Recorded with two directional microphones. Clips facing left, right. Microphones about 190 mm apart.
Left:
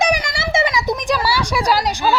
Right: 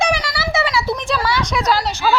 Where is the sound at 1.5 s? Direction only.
10° left (ahead or behind).